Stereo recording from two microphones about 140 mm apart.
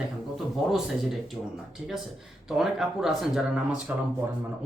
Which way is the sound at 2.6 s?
Centre (ahead or behind).